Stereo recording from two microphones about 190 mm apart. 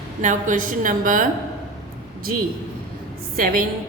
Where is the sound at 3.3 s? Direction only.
45° right (ahead or behind).